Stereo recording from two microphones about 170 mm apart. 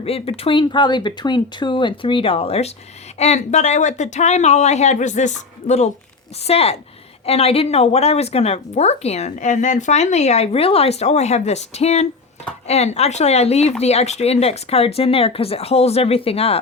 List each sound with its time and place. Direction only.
0.0 s speech: 35° left (ahead or behind)